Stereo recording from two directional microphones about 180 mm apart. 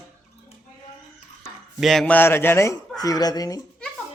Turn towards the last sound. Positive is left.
turn(degrees=20)  # may be behind; listen again after turning